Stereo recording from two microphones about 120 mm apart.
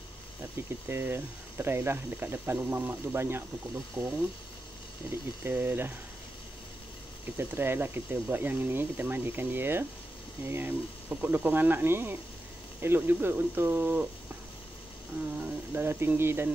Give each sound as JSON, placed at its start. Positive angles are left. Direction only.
{"t": 0.8, "sound": "speech", "side_deg": -20}
{"t": 7.3, "sound": "speech", "side_deg": -20}
{"t": 15.4, "sound": "speech", "side_deg": -15}